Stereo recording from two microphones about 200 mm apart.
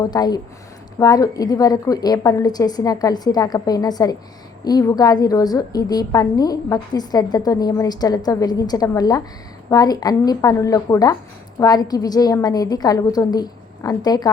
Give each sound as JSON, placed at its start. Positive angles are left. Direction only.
{"t": 0.0, "sound": "a woman's voice", "side_deg": 20}